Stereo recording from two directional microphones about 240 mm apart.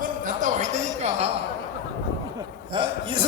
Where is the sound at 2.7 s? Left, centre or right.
Right.